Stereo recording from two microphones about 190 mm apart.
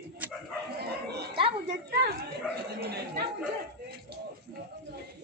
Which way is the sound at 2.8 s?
55° right (ahead or behind).